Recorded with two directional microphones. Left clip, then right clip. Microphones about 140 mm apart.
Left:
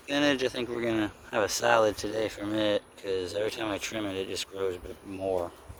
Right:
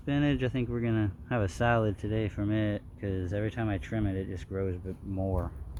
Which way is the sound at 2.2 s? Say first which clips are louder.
Left 5 dB; 30° left (ahead or behind).